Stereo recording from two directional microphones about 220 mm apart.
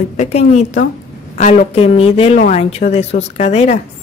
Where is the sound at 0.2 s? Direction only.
30° left (ahead or behind).